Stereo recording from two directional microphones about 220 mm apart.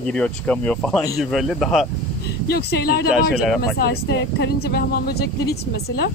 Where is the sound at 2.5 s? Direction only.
45° left (ahead or behind).